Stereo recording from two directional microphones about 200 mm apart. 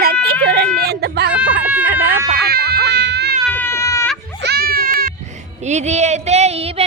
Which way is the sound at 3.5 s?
10° left (ahead or behind).